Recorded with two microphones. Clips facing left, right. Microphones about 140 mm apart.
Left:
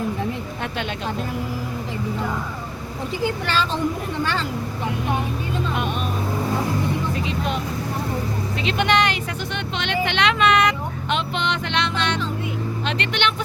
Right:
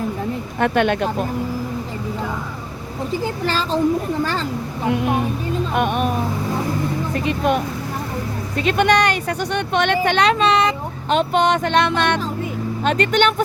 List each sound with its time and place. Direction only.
0.6 s speech: 55° right (ahead or behind)
3.2 s a woman's voice: 35° right (ahead or behind)
5.7 s speech: 55° right (ahead or behind)
7.3 s speech: 55° right (ahead or behind); by 11.2 s 30° right (ahead or behind)
11.2 s speech: 45° right (ahead or behind)